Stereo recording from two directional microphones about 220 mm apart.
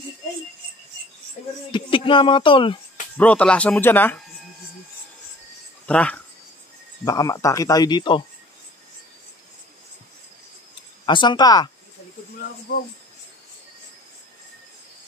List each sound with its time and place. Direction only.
1.7 s speech: 25° left (ahead or behind)
3.2 s speech: 5° left (ahead or behind)
5.9 s speech: 5° left (ahead or behind)
7.1 s speech: 15° left (ahead or behind)
11.1 s speech: 20° left (ahead or behind)
12.4 s speech: 40° left (ahead or behind)